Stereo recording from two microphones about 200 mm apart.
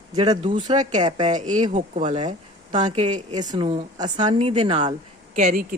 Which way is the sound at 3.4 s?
25° right (ahead or behind).